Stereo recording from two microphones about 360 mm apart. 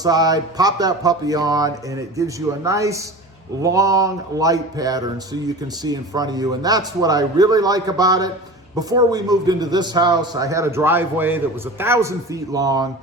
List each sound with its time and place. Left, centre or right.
0.0 s a man's voice: centre